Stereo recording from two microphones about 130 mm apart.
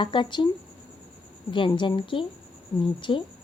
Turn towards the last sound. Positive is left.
turn(degrees=40)  # may be behind; listen again after turning